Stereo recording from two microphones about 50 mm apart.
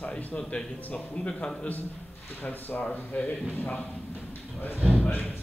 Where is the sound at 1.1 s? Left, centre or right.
Left.